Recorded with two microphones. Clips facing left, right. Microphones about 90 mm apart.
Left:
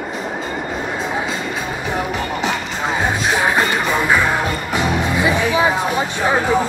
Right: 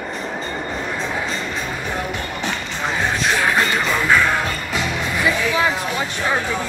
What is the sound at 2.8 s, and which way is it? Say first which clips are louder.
Music: left 1 dB; 20° left (ahead or behind).